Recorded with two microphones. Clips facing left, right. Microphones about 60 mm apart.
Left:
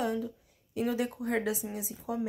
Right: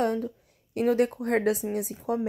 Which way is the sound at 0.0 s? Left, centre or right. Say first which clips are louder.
Right 5 dB; right.